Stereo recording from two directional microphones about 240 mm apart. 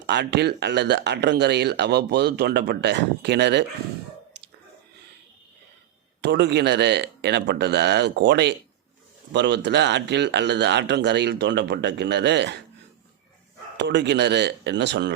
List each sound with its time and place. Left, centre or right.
0.1 s speech: right
6.2 s speech: right
13.7 s speech: right